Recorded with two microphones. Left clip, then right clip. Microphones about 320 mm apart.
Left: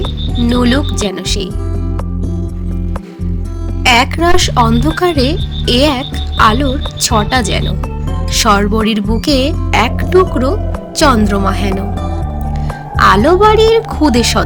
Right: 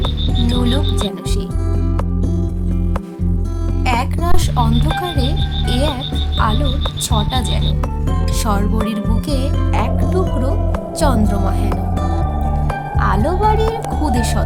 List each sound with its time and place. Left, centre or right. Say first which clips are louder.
0.5 s speech: left 8 dB; right
0.9 s music: left 6 dB; right
3.8 s a sound: left 10 dB; right
4.9 s speech: left 8 dB; right
13.0 s speech: left 11 dB; right